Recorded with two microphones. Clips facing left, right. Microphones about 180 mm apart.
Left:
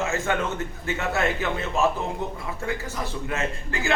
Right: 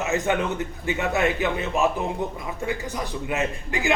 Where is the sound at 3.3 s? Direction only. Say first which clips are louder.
Right 4 dB; 15° right (ahead or behind).